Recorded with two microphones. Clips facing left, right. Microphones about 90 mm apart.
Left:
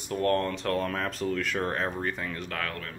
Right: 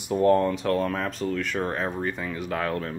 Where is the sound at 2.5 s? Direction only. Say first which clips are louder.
Right 7 dB; 20° right (ahead or behind).